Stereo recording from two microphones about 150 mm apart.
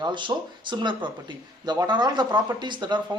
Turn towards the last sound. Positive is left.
turn(degrees=-30)  # may be behind; listen again after turning